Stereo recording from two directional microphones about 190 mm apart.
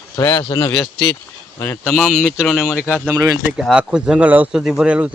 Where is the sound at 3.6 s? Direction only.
5° right (ahead or behind).